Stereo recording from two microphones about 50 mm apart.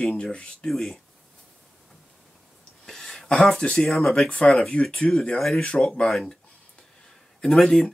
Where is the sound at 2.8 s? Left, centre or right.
Centre.